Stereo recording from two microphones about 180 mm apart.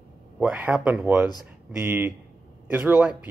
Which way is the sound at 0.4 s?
5° right (ahead or behind).